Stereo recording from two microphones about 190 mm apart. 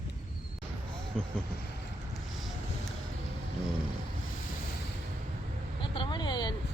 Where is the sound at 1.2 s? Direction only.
5° left (ahead or behind).